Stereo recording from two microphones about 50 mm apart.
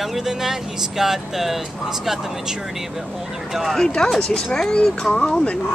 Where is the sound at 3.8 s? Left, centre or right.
Centre.